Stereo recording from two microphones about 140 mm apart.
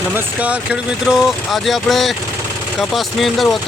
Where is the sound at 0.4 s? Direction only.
5° right (ahead or behind).